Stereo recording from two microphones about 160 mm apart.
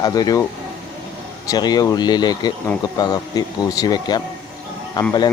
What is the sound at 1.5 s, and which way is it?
Speech, 25° left (ahead or behind).